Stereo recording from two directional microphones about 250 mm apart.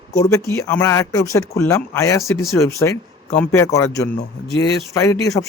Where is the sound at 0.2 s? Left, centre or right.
Centre.